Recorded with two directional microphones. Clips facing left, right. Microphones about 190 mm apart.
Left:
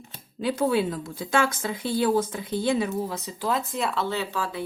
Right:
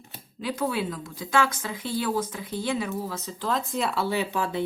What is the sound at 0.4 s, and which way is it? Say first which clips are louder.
A woman's voice: left 4 dB; 25° left (ahead or behind).